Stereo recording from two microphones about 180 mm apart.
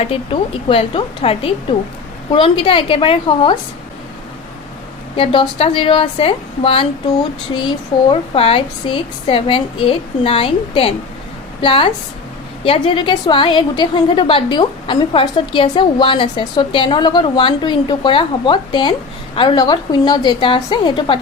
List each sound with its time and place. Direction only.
0.0 s a woman's voice: 30° left (ahead or behind)
5.1 s a woman's voice: 30° left (ahead or behind)
8.1 s a woman's voice: 30° left (ahead or behind)